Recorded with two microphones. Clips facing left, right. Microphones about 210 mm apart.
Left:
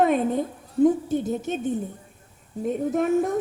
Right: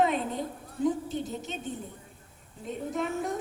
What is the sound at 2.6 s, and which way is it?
Speech, 50° left (ahead or behind).